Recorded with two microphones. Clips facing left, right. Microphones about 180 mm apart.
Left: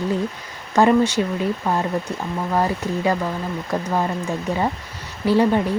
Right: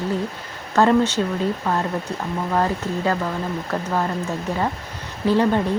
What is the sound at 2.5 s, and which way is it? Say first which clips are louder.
Speech: left 1 dB; 10° left (ahead or behind).